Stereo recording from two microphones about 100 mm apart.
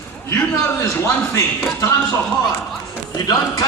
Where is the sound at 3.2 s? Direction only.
35° left (ahead or behind).